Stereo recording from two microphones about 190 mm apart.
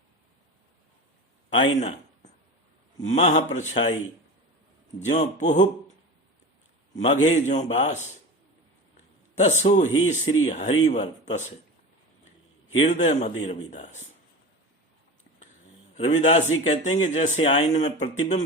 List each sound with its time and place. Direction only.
3.0 s speech: 35° left (ahead or behind)
4.9 s speech: 35° left (ahead or behind)
7.0 s speech: 35° left (ahead or behind)
9.4 s speech: 35° left (ahead or behind)
12.8 s speech: 35° left (ahead or behind)
16.0 s speech: 35° left (ahead or behind)